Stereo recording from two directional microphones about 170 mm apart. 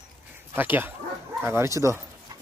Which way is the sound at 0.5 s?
10° right (ahead or behind).